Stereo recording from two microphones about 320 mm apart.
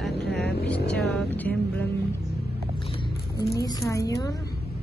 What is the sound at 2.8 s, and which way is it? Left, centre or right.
Music, centre.